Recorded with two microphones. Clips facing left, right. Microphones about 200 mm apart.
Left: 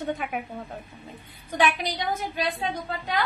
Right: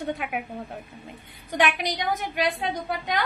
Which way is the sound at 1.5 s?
15° right (ahead or behind).